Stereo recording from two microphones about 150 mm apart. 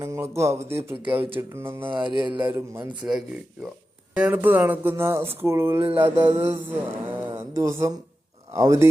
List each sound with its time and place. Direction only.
0.0 s speech: 20° right (ahead or behind)
1.9 s a sound: 30° right (ahead or behind)
2.4 s speech: 15° right (ahead or behind)
3.0 s speech: 5° right (ahead or behind); by 8.9 s 20° right (ahead or behind)